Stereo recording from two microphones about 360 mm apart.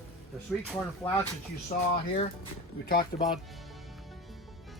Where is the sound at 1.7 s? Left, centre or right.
Left.